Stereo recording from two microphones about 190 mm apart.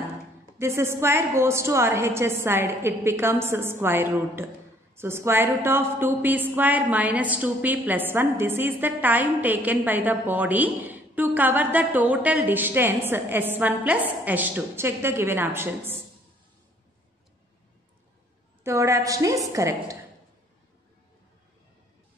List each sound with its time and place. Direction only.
0.6 s a woman's voice: 15° right (ahead or behind)
18.6 s a woman's voice: 15° right (ahead or behind)